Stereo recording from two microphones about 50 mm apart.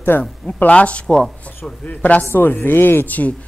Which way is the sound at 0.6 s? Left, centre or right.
Left.